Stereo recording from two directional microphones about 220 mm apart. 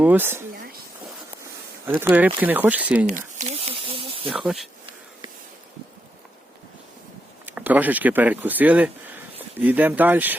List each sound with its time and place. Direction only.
0.0 s speech: 10° right (ahead or behind)
1.9 s speech: 10° right (ahead or behind)
3.1 s snake: 35° right (ahead or behind)
4.3 s speech: centre (ahead or behind)
7.4 s speech: 5° right (ahead or behind)